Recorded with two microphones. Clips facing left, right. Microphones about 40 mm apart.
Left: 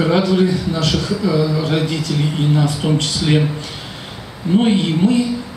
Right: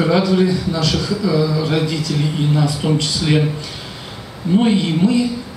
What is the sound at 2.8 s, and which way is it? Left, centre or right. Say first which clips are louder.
Speech: even; centre.